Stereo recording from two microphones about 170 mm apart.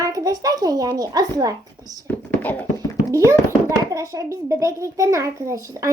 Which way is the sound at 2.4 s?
10° left (ahead or behind).